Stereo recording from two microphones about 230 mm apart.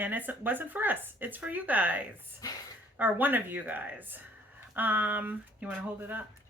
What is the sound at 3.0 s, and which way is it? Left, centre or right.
Speech, centre.